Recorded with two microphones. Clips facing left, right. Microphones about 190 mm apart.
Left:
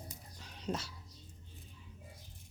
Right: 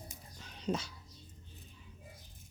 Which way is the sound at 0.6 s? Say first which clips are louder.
Right 3 dB; 5° left (ahead or behind).